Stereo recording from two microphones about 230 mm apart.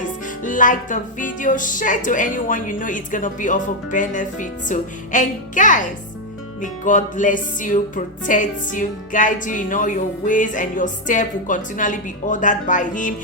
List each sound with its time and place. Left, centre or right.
0.4 s music: left